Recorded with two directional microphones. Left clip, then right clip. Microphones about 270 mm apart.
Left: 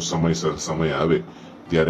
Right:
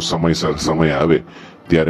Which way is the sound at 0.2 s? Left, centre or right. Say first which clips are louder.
Right 6 dB; right.